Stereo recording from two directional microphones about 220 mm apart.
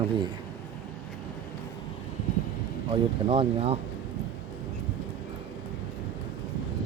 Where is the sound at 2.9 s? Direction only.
25° right (ahead or behind).